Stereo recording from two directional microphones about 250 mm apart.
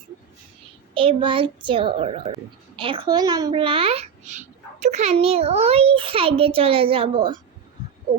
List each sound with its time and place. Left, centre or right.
0.9 s a child's voice: right